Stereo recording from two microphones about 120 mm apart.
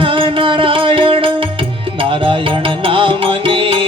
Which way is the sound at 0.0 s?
45° right (ahead or behind).